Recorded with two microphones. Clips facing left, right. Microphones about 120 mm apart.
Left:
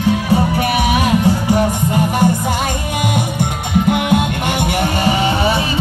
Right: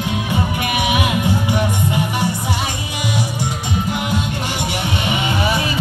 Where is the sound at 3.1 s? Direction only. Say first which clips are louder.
Left 3 dB; 55° left (ahead or behind); by 5.7 s 30° left (ahead or behind).